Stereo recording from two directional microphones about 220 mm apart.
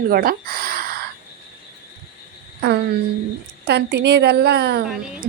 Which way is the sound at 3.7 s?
50° right (ahead or behind).